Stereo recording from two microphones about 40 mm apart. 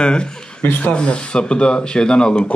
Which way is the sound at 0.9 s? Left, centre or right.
Left.